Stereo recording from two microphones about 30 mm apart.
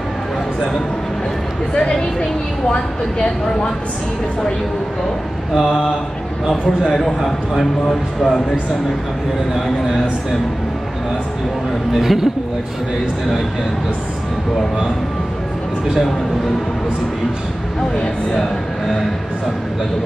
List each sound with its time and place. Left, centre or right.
1.7 s speech: left
5.5 s a man's voice: centre
7.2 s a man's voice: centre
11.9 s a man's voice: centre